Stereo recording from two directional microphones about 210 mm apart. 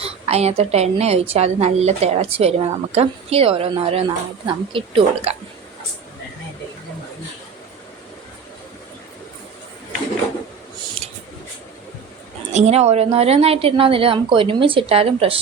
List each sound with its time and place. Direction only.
0.0 s a woman's voice: 30° right (ahead or behind)
11.0 s a sound: 30° right (ahead or behind)
12.5 s a woman's voice: 30° right (ahead or behind)